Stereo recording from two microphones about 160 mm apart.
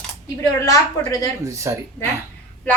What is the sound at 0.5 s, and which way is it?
Speech, 20° left (ahead or behind).